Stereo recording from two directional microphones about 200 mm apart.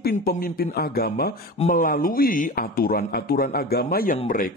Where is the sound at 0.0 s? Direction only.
50° left (ahead or behind).